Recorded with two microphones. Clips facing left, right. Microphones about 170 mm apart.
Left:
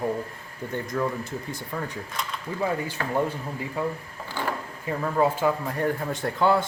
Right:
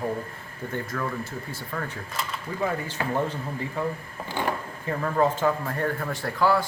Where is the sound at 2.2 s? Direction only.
5° right (ahead or behind).